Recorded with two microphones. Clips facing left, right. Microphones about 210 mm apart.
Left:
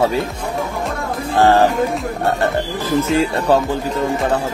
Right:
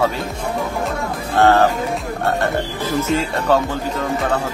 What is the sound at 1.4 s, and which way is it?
Speech, 15° left (ahead or behind).